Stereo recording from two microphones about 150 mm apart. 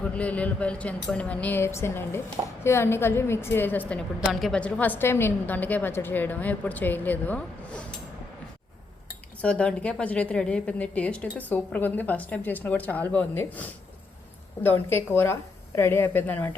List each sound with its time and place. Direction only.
0.0 s a woman's voice: 10° left (ahead or behind)
9.4 s a woman's voice: 10° left (ahead or behind)